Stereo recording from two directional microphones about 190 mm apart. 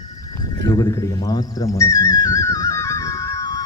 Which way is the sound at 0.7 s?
20° left (ahead or behind).